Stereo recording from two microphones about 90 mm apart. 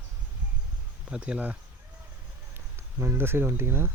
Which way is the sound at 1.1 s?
10° right (ahead or behind).